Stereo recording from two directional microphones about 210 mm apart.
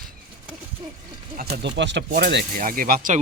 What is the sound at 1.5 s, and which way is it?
Speech, 55° right (ahead or behind).